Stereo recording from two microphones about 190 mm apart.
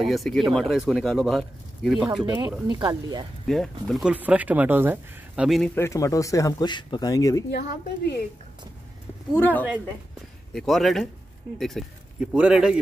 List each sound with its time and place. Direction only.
0.0 s speech: centre (ahead or behind)
2.7 s speech: 20° right (ahead or behind)
3.4 s speech: 5° left (ahead or behind)
5.8 s speech: 15° left (ahead or behind)
7.5 s a woman's voice: 60° left (ahead or behind)
9.3 s speech: 10° left (ahead or behind)